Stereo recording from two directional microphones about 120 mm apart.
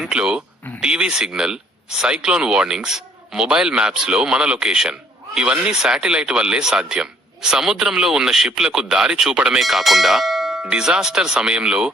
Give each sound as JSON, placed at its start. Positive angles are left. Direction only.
{"t": 0.0, "sound": "speech", "side_deg": -5}